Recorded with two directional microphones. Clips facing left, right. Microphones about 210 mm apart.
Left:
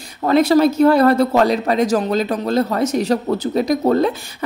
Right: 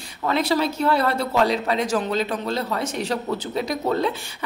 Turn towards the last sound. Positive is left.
turn(degrees=45)  # may be behind; listen again after turning